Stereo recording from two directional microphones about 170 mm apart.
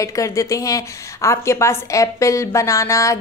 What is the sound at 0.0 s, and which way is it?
A woman's voice, 20° left (ahead or behind).